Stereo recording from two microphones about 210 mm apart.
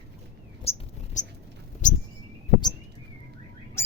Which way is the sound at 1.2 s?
35° left (ahead or behind).